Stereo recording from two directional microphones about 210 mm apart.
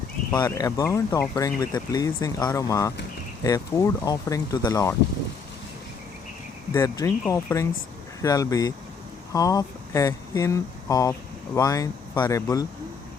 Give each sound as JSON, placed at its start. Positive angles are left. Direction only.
{"t": 0.3, "sound": "speech", "side_deg": 15}
{"t": 6.7, "sound": "speech", "side_deg": 15}